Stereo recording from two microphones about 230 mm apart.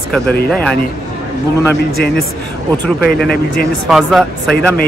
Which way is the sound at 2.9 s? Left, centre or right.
Left.